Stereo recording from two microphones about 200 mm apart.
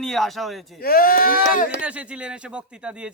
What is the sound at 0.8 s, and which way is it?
Speech, 45° left (ahead or behind).